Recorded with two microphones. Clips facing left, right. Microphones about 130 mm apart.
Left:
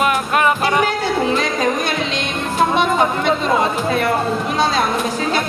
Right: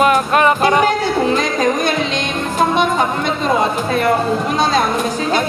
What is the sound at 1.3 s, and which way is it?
Music, centre (ahead or behind).